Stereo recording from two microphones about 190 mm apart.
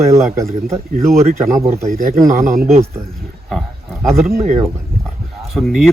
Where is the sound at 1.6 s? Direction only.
35° right (ahead or behind).